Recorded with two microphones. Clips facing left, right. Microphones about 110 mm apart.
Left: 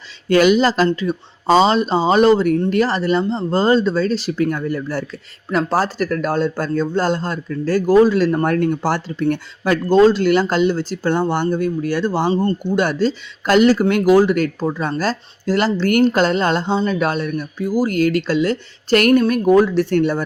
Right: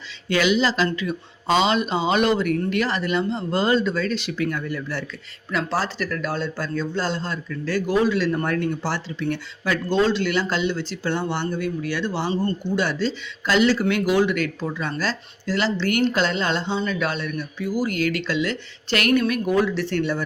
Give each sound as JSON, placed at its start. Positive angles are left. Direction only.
{"t": 0.3, "sound": "a man's voice", "side_deg": 45}